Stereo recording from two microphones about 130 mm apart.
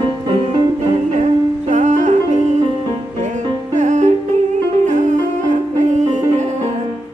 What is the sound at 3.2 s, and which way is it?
Music, 65° right (ahead or behind).